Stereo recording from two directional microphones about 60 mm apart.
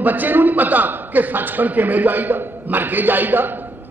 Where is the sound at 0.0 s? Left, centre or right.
Right.